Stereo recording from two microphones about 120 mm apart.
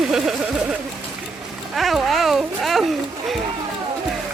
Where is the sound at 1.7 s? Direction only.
Centre (ahead or behind).